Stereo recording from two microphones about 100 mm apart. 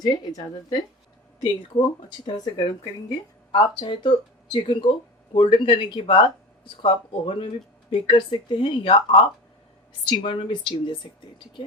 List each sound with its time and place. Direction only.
0.0 s a woman's voice: 40° left (ahead or behind)
1.4 s speech: 50° left (ahead or behind)
3.6 s speech: 55° left (ahead or behind)
10.2 s speech: 55° left (ahead or behind)